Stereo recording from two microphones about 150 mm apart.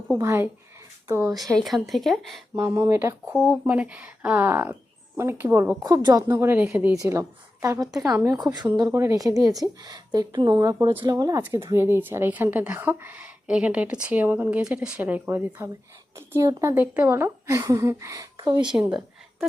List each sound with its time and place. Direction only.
0.2 s a woman's voice: 15° right (ahead or behind)
1.4 s speech: centre (ahead or behind)
2.6 s a woman's voice: 20° right (ahead or behind)
3.3 s speech: centre (ahead or behind)
3.7 s a woman's voice: 10° right (ahead or behind)
5.8 s a woman's voice: 25° right (ahead or behind)